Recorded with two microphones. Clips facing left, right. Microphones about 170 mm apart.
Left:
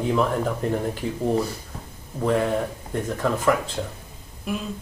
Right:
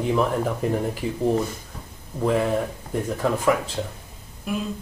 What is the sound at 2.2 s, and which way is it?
Speech, 5° right (ahead or behind).